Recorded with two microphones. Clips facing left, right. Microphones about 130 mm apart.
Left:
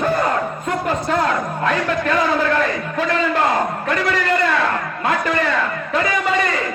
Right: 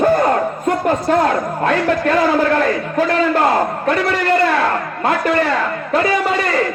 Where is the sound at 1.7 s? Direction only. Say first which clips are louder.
Right 4 dB; 40° right (ahead or behind).